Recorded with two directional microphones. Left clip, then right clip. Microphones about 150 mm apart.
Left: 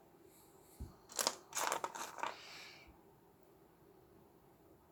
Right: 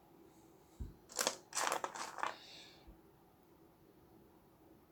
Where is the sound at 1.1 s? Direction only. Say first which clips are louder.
Even; centre (ahead or behind).